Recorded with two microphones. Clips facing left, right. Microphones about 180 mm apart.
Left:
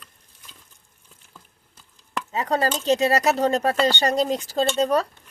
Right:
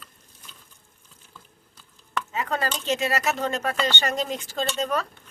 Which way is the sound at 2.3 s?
35° left (ahead or behind).